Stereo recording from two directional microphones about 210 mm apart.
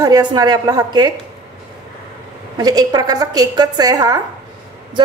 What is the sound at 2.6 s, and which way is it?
A woman's voice, 20° right (ahead or behind).